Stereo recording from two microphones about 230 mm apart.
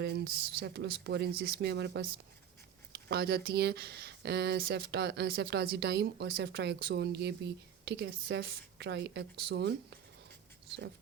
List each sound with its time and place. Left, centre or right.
0.0 s speech: right